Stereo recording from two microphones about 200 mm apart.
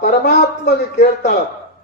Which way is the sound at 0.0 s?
50° left (ahead or behind).